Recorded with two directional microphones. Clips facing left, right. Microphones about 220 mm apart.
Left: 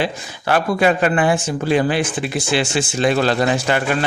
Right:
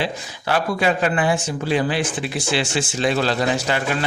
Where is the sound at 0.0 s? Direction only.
55° left (ahead or behind).